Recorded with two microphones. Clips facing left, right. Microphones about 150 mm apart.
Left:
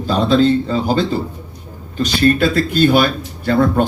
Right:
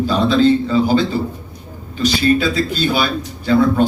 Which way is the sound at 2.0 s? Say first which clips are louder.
Left 1 dB; 55° left (ahead or behind).